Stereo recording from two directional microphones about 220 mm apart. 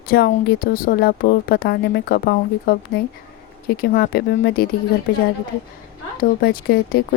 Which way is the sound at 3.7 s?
40° left (ahead or behind).